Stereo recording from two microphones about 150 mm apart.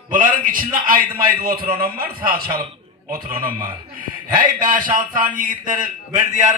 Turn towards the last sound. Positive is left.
turn(degrees=-55)  # may be behind; listen again after turning